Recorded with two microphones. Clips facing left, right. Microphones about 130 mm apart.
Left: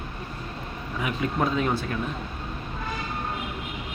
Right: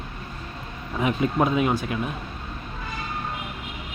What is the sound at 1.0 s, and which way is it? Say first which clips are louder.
Speech: right 4 dB; 25° right (ahead or behind).